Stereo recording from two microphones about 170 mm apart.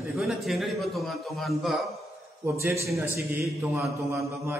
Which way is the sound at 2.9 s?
15° right (ahead or behind).